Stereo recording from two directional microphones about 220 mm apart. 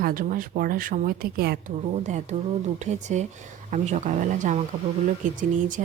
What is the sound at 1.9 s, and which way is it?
A woman's voice, 30° right (ahead or behind).